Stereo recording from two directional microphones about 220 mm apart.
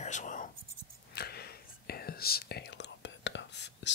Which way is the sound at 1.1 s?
45° left (ahead or behind).